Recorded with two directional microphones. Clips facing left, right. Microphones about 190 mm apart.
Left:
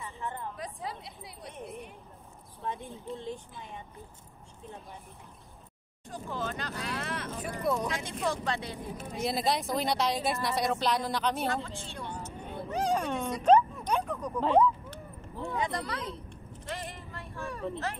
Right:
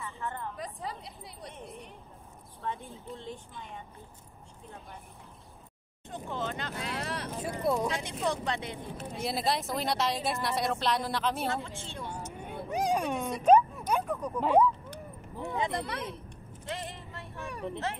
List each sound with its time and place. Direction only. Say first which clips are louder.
0.0 s a sound: even; 15° left (ahead or behind)
0.6 s speech: even; centre (ahead or behind)
2.7 s speech: left 3 dB; 15° left (ahead or behind)
6.0 s speech: even; 20° right (ahead or behind)
7.0 s speech: even; 35° right (ahead or behind)
7.2 s speech: right 1 dB; 15° right (ahead or behind)
7.6 s speech: right 1 dB; 25° right (ahead or behind)
8.9 s speech: left 2 dB; centre (ahead or behind)
11.6 s a sound: even; 15° right (ahead or behind)